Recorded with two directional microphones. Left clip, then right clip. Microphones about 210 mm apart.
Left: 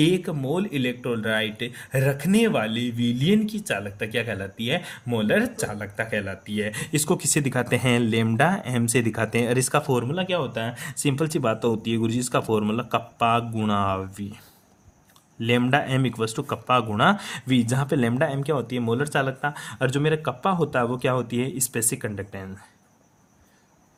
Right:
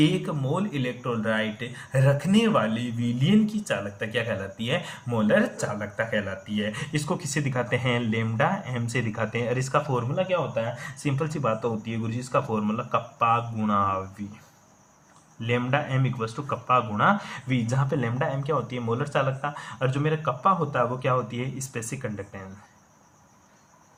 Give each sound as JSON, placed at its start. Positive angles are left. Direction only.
{"t": 0.0, "sound": "speech", "side_deg": 40}
{"t": 15.4, "sound": "speech", "side_deg": 60}